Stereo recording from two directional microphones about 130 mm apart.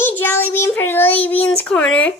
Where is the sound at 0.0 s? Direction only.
15° left (ahead or behind).